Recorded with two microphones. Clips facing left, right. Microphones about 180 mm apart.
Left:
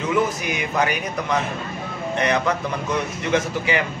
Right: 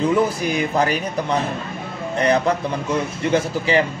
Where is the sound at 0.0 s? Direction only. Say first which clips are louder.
Right 3 dB; 35° right (ahead or behind).